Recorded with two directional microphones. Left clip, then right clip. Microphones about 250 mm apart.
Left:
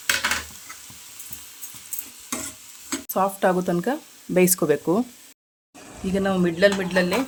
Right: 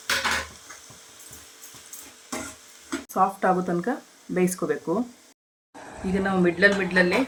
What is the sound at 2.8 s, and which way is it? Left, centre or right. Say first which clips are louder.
Speech: even; left.